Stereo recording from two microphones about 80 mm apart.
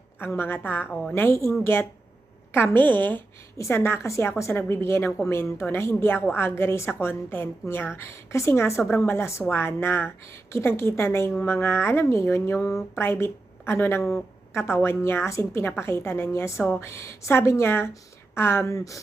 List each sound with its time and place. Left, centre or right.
0.2 s a woman's voice: left